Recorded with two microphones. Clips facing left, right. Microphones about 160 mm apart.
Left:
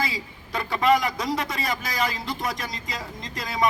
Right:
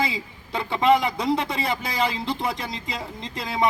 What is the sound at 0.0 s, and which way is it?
A man's voice, 25° right (ahead or behind).